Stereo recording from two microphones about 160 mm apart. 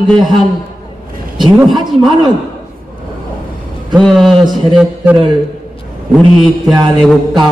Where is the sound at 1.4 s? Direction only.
Centre (ahead or behind).